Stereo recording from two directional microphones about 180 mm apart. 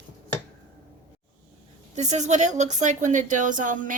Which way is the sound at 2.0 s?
40° right (ahead or behind).